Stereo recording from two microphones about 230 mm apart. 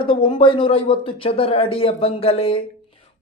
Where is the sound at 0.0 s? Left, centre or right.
Left.